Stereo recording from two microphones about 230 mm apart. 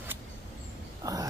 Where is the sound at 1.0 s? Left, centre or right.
Centre.